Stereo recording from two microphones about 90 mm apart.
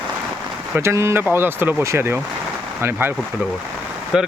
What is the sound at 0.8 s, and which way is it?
Speech, 30° right (ahead or behind).